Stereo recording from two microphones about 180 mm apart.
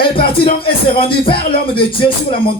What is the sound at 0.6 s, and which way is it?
Speech, 30° left (ahead or behind).